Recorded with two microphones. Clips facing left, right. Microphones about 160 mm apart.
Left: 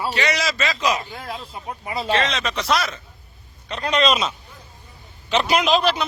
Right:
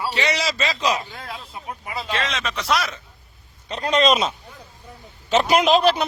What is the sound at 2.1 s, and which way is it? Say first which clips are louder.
Speech: left 3 dB; 5° right (ahead or behind).